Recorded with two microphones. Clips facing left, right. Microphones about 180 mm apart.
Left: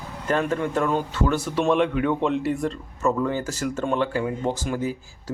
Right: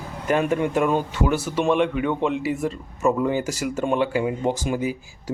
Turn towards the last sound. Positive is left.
turn(degrees=-15)  # may be behind; listen again after turning